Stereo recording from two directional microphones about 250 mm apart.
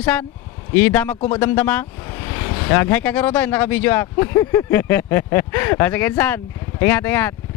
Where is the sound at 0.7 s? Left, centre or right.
Centre.